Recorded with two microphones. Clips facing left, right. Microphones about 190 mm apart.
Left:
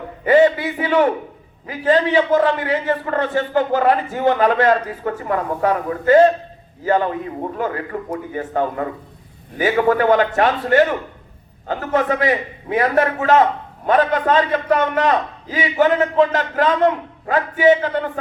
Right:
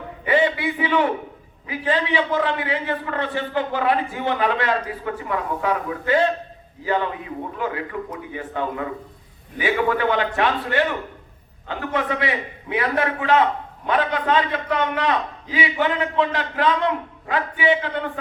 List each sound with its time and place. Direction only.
0.3 s a man's voice: 40° left (ahead or behind)